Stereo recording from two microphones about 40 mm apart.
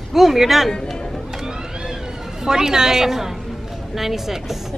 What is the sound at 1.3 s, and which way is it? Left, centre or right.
Vehicle, centre.